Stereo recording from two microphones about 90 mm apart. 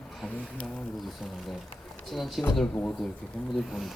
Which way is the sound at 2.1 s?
Centre (ahead or behind).